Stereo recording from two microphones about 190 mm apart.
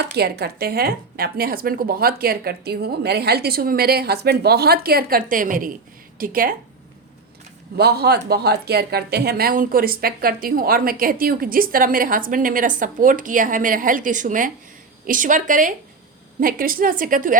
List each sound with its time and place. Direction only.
0.0 s a woman's voice: 60° right (ahead or behind)
7.8 s a man's voice: 55° right (ahead or behind)